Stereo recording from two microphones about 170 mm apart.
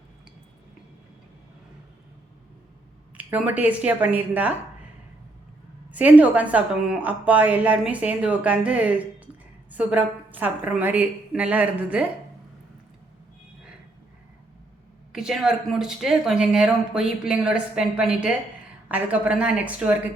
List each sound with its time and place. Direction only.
3.2 s a woman's voice: 10° right (ahead or behind)
5.9 s a woman's voice: 10° right (ahead or behind)
15.1 s a woman's voice: 5° right (ahead or behind)